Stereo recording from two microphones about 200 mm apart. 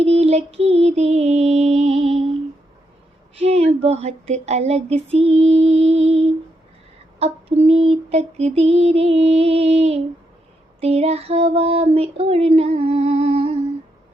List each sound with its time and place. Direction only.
0.0 s female singing: 30° right (ahead or behind)
3.3 s a sound: 30° right (ahead or behind)
7.2 s female singing: 30° right (ahead or behind)